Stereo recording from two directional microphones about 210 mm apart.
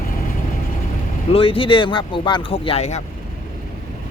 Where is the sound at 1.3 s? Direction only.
25° left (ahead or behind).